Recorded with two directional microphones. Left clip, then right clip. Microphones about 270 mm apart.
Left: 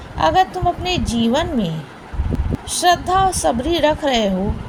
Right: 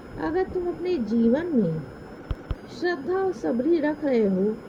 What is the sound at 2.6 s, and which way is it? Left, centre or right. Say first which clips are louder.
Speech: left 12 dB; right.